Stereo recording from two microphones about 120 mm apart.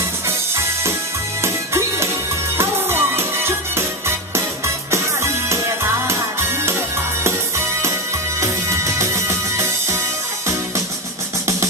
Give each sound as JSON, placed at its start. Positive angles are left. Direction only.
{"t": 0.3, "sound": "music", "side_deg": -20}
{"t": 8.4, "sound": "music", "side_deg": -25}